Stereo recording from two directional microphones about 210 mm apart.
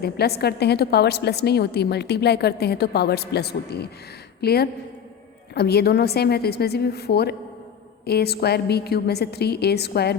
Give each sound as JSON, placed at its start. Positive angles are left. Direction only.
{"t": 0.0, "sound": "a woman's voice", "side_deg": 50}